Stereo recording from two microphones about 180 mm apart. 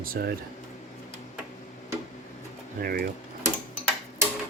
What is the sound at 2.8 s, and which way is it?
Speech, 55° right (ahead or behind).